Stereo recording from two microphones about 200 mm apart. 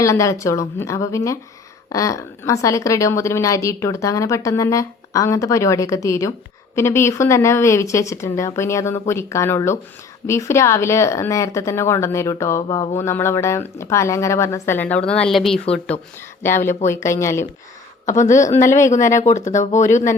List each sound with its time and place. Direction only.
0.0 s a woman's voice: 15° left (ahead or behind)
16.6 s a woman's voice: 15° left (ahead or behind)
18.1 s speech: 35° left (ahead or behind)